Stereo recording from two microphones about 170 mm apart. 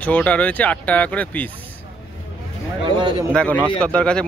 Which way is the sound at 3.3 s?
5° left (ahead or behind).